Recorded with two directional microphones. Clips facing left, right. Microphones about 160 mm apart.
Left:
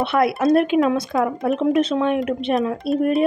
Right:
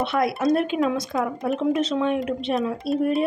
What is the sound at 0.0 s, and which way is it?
Speech, 65° left (ahead or behind).